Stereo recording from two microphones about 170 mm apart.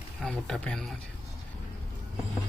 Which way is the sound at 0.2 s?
5° left (ahead or behind).